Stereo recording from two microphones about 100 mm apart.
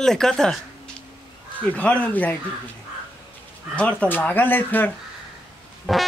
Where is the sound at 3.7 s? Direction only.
10° left (ahead or behind).